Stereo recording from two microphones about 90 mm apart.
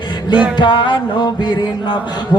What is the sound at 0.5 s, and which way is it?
Music, 60° left (ahead or behind).